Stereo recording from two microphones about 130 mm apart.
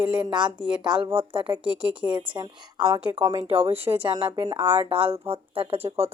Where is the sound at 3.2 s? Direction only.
45° right (ahead or behind).